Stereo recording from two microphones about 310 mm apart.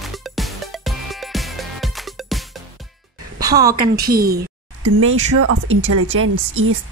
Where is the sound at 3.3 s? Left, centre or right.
Centre.